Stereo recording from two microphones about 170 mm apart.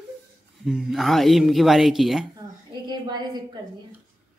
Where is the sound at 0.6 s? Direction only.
Centre (ahead or behind).